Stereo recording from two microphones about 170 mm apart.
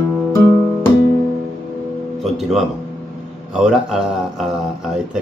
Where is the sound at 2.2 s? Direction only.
Centre (ahead or behind).